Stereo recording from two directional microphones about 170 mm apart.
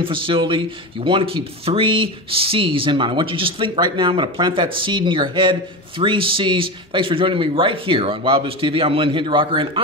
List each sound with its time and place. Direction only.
0.0 s speech: 30° right (ahead or behind)